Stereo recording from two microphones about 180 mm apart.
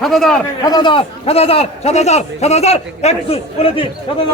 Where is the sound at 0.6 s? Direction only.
25° left (ahead or behind).